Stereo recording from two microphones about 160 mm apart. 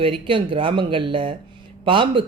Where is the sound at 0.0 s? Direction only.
35° right (ahead or behind).